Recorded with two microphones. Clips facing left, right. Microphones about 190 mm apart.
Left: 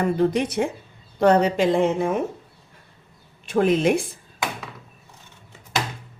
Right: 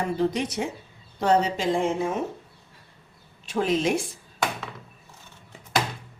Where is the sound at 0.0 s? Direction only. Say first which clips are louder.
Left 4 dB; 55° left (ahead or behind).